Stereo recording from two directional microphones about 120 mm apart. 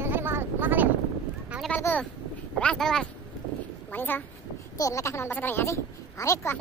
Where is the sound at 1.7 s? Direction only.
15° left (ahead or behind).